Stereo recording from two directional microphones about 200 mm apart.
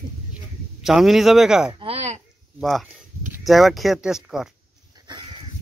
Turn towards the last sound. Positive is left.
turn(degrees=-20)  # may be behind; listen again after turning